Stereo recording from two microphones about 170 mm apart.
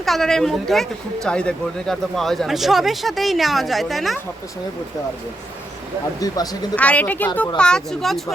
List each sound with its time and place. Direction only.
0.0 s speech: centre (ahead or behind)
6.1 s speech: 20° left (ahead or behind)
6.7 s speech: 10° left (ahead or behind)